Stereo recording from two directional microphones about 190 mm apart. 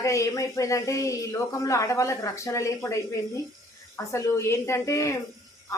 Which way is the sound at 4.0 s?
15° left (ahead or behind).